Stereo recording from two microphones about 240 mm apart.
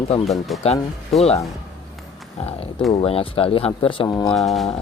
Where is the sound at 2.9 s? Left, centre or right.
Left.